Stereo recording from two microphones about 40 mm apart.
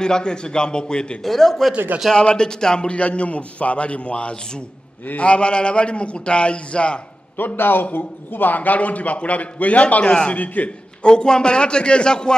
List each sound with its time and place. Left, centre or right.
0.0 s a man's voice: centre
1.2 s speech: centre
2.1 s a man's voice: left
2.9 s a man's voice: left
7.3 s a man's voice: left
10.0 s a man's voice: left
10.3 s a man's voice: left
11.0 s a man's voice: left